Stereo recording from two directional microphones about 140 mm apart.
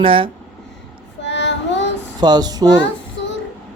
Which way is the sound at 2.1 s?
30° right (ahead or behind).